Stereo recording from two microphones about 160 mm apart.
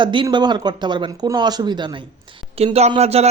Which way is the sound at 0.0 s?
30° right (ahead or behind).